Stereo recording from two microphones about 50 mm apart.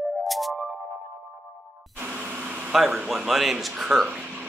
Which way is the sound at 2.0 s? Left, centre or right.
Right.